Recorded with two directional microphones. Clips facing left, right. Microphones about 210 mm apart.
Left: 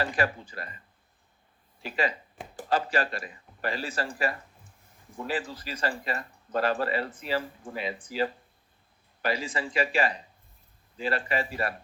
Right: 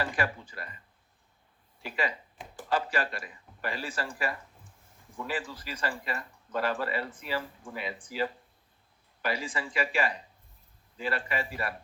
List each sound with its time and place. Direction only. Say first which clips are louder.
0.0 s speech: left 3 dB; 40° left (ahead or behind)
1.8 s speech: left 3 dB; 35° left (ahead or behind)
9.2 s speech: left 3 dB; 40° left (ahead or behind)